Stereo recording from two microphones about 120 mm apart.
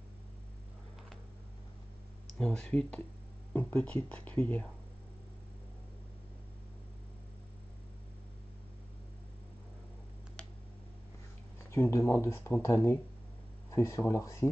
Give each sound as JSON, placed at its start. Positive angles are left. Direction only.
{"t": 2.3, "sound": "speech", "side_deg": 5}
{"t": 11.7, "sound": "speech", "side_deg": 20}